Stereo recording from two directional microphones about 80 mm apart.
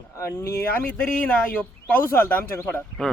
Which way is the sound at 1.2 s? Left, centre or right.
Left.